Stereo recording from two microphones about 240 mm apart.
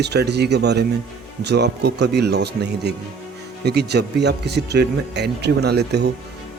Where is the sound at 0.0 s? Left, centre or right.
Right.